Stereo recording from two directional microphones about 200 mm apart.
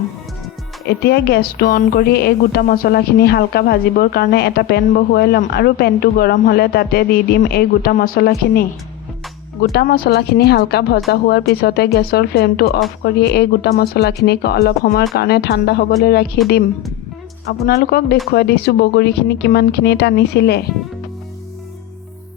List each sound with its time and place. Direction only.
0.9 s a woman's voice: 55° left (ahead or behind)
9.7 s a woman's voice: 50° left (ahead or behind)
17.4 s a woman's voice: 50° left (ahead or behind)